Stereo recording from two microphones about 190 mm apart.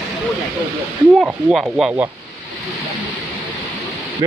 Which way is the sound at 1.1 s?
5° right (ahead or behind).